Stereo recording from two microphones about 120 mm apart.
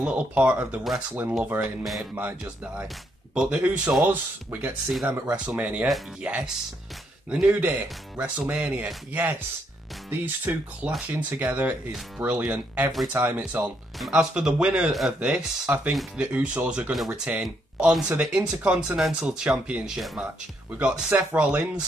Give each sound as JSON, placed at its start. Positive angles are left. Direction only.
{"t": 0.0, "sound": "speech", "side_deg": -10}
{"t": 13.9, "sound": "speech", "side_deg": -5}